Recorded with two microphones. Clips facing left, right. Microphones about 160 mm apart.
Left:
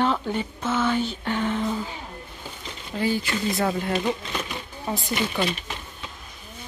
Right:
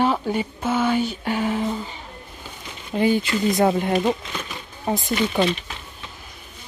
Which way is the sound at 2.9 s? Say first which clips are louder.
Right 5 dB; 20° right (ahead or behind).